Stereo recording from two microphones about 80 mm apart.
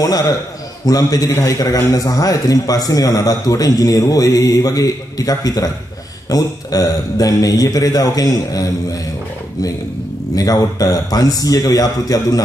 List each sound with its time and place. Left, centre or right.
0.0 s a man's voice: left
10.3 s a man's voice: left